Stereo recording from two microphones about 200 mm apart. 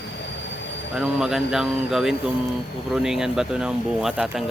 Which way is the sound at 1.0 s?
5° right (ahead or behind).